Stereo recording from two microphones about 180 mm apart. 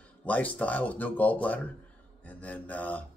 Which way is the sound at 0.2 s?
10° left (ahead or behind).